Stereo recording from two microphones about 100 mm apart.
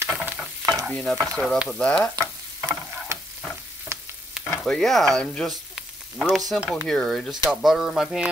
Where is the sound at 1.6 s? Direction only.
10° left (ahead or behind).